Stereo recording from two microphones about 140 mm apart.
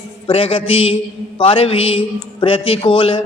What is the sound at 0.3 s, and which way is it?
Mantra, 40° left (ahead or behind).